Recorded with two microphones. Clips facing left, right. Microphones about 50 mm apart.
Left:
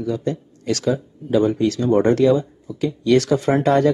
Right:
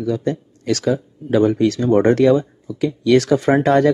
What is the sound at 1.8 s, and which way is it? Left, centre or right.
Speech, right.